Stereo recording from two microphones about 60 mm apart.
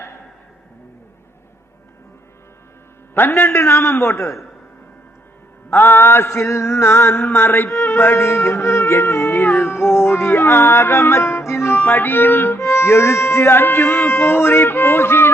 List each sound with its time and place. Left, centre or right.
3.2 s a man's voice: left
5.7 s speech: left
9.3 s music: left
12.5 s speech: left